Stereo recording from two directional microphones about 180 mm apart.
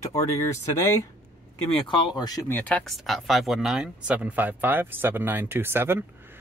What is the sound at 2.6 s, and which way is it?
Speech, 5° left (ahead or behind).